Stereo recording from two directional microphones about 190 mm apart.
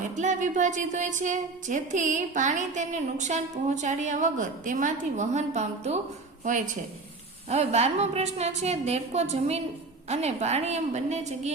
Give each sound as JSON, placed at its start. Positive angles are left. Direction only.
{"t": 0.2, "sound": "a woman's voice", "side_deg": -40}
{"t": 7.5, "sound": "a woman's voice", "side_deg": -35}